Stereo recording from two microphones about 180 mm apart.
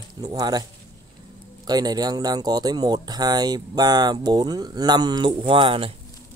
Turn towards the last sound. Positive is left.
turn(degrees=-30)  # may be behind; listen again after turning